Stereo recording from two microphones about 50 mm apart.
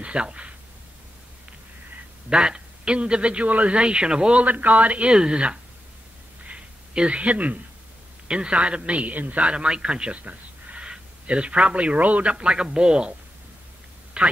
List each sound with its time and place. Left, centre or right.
0.0 s speech: right
2.2 s a man's voice: centre
4.5 s a man's voice: right
6.4 s a sound: right
8.3 s a man's voice: right
14.2 s speech: right